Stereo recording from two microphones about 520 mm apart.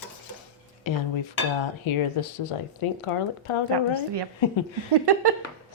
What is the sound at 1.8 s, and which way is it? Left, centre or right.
Speech, left.